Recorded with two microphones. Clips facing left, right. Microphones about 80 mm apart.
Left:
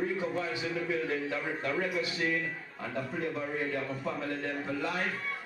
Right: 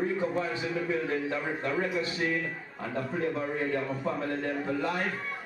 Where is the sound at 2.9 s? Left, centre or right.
Centre.